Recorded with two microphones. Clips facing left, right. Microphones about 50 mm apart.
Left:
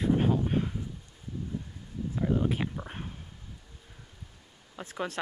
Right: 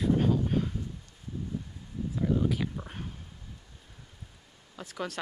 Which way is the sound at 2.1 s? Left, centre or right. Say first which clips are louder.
Even; centre.